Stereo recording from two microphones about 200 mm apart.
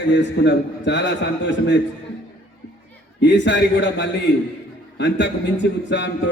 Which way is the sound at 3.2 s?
65° left (ahead or behind).